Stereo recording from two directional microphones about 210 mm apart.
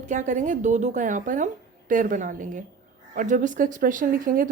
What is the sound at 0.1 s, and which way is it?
A woman's voice, 35° right (ahead or behind).